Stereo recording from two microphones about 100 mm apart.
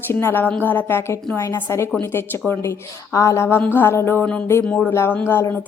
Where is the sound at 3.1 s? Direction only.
30° left (ahead or behind).